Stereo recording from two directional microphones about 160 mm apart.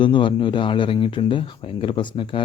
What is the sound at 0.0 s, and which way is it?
Speech, 30° left (ahead or behind).